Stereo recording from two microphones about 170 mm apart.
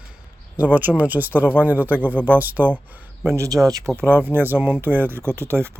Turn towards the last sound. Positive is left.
turn(degrees=-15)  # may be behind; listen again after turning